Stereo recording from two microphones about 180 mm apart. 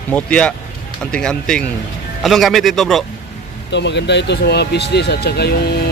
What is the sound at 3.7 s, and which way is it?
Speech, 75° left (ahead or behind).